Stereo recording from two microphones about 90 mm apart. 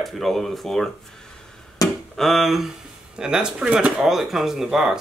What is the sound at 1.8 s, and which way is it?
Chop, 40° left (ahead or behind).